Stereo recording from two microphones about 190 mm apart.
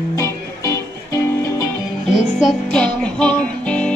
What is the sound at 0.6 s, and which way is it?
Music, 15° left (ahead or behind).